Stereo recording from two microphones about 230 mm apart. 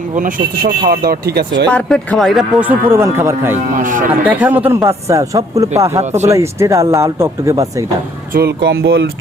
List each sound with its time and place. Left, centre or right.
0.2 s speech: right
1.7 s speech: centre
3.8 s speech: right
4.3 s speech: centre
8.3 s speech: right